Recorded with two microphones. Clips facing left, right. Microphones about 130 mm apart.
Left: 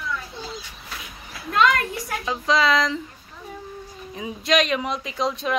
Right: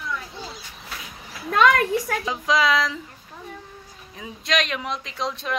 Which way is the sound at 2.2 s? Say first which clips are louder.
Left 4 dB; 10° right (ahead or behind).